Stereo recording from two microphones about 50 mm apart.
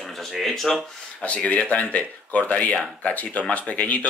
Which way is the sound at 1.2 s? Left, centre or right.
Left.